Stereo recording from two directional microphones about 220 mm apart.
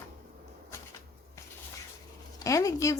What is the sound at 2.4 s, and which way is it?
Speech, 15° left (ahead or behind).